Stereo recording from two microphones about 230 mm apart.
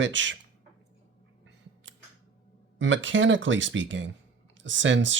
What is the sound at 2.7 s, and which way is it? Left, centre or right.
Speech, right.